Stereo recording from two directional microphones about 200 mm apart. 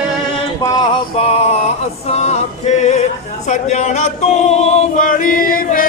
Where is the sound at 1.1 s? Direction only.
30° left (ahead or behind).